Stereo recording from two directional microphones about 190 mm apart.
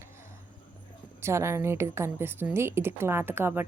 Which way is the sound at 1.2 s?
15° right (ahead or behind).